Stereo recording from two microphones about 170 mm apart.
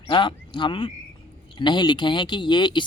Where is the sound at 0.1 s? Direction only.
30° left (ahead or behind).